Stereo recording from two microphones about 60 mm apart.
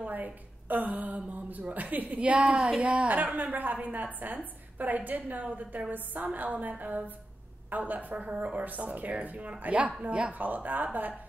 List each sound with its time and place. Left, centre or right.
0.0 s a woman's voice: right
2.5 s speech: centre
2.8 s a woman's voice: right